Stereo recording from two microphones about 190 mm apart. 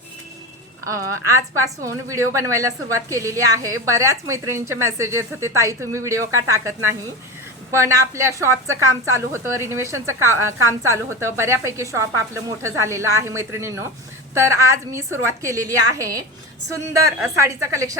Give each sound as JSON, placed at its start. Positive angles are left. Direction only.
{"t": 1.3, "sound": "a woman's voice", "side_deg": -15}
{"t": 7.7, "sound": "a woman's voice", "side_deg": -15}